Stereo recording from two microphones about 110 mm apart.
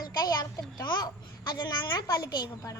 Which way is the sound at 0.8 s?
40° left (ahead or behind).